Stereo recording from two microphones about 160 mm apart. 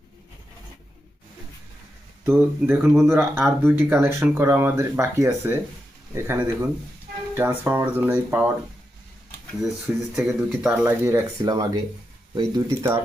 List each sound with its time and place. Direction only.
2.2 s speech: 15° right (ahead or behind)
10.2 s speech: centre (ahead or behind)
10.7 s speech: 15° right (ahead or behind)